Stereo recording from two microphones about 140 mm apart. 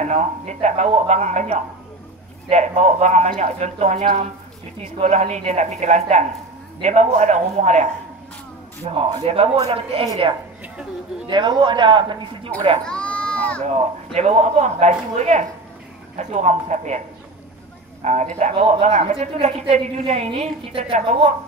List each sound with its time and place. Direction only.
0.0 s a man's voice: 55° right (ahead or behind)
8.8 s a man's voice: 40° right (ahead or behind)
11.2 s a man's voice: 35° right (ahead or behind)
12.8 s a sound: 5° left (ahead or behind)
13.7 s a woman's voice: 50° right (ahead or behind)
18.0 s a man's voice: 60° right (ahead or behind)